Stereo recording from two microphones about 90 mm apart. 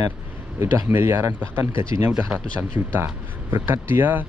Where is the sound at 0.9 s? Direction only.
25° right (ahead or behind).